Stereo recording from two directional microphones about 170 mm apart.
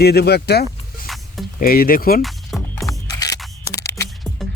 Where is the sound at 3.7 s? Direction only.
15° left (ahead or behind).